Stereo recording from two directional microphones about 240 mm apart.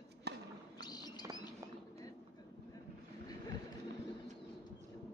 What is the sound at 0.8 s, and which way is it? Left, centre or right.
Bird, centre.